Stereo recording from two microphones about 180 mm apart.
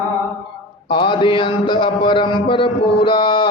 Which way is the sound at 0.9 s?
25° left (ahead or behind).